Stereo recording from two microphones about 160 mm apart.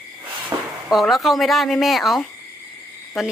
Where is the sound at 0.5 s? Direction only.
20° right (ahead or behind).